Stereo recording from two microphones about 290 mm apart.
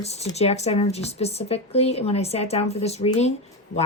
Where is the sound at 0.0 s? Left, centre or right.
Left.